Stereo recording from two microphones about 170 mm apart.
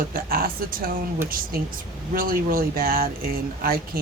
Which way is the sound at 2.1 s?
60° right (ahead or behind).